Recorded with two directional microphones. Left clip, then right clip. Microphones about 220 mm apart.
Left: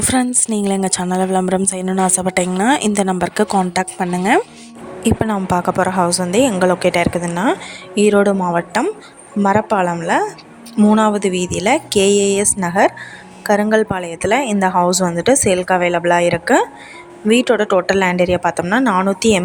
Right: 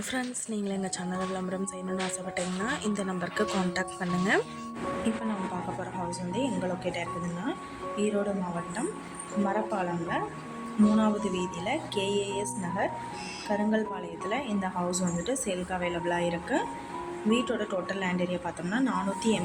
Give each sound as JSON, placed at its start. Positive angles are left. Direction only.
{"t": 0.0, "sound": "a woman's voice", "side_deg": 50}
{"t": 5.8, "sound": "a woman's voice", "side_deg": 50}